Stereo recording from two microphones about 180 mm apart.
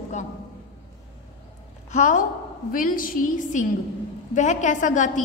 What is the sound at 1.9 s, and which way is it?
A woman's voice, 40° left (ahead or behind).